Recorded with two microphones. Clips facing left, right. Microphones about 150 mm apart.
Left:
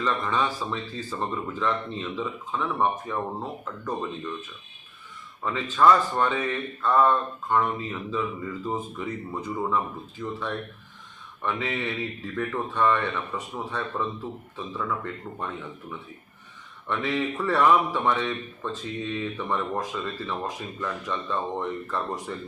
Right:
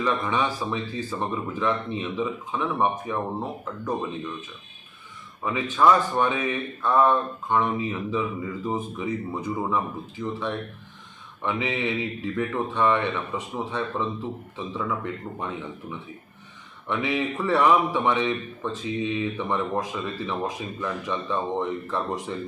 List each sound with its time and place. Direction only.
0.0 s a man's voice: 15° right (ahead or behind)
5.4 s a man's voice: 10° right (ahead or behind)